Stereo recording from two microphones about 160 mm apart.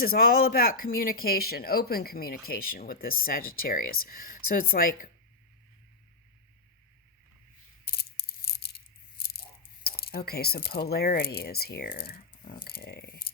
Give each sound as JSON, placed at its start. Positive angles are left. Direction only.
{"t": 0.0, "sound": "speech", "side_deg": 65}
{"t": 7.9, "sound": "a sound", "side_deg": 75}
{"t": 9.8, "sound": "speech", "side_deg": 75}